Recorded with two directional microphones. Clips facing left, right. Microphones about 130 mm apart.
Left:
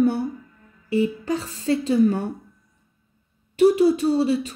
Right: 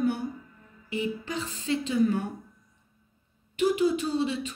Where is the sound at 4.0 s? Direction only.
35° left (ahead or behind).